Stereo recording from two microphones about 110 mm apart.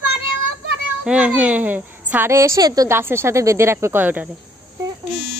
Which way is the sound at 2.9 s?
20° right (ahead or behind).